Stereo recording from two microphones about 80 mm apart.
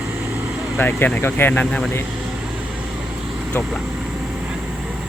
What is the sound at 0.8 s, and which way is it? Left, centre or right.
Speech, left.